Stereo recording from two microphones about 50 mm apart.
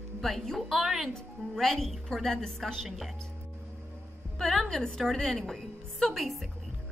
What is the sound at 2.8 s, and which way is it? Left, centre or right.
Speech, centre.